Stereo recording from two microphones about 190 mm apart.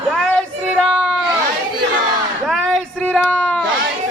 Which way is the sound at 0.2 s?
Centre (ahead or behind).